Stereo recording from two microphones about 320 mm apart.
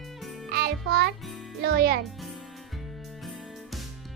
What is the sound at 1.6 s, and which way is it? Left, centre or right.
Speech, right.